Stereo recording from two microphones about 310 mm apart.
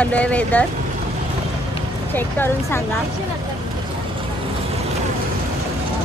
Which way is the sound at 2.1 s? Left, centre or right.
Centre.